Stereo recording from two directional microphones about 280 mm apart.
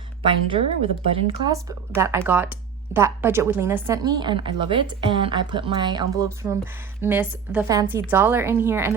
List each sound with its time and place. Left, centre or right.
0.3 s a woman's voice: centre